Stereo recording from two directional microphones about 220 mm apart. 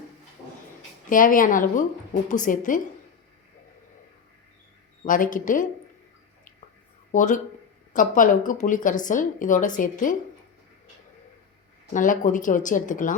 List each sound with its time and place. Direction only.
1.1 s a woman's voice: 40° left (ahead or behind)
5.0 s a woman's voice: 35° left (ahead or behind)
7.1 s a woman's voice: 35° left (ahead or behind)
11.9 s a woman's voice: 35° left (ahead or behind)